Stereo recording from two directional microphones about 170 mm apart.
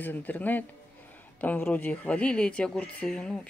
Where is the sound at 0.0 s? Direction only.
10° left (ahead or behind).